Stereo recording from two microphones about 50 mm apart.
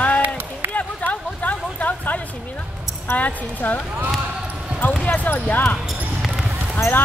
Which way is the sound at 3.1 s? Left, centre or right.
Left.